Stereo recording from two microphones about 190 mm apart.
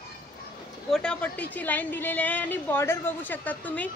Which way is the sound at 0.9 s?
5° left (ahead or behind).